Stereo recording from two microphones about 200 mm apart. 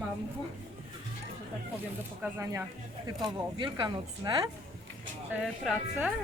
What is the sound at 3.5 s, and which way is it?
Speech, 25° right (ahead or behind).